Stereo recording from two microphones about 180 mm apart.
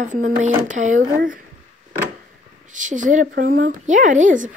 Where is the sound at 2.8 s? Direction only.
45° right (ahead or behind).